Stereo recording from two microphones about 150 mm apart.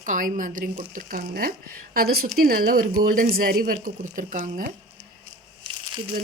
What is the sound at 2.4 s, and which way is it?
Speech, 75° right (ahead or behind).